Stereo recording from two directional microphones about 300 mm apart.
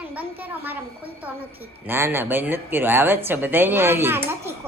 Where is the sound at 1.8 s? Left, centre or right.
Centre.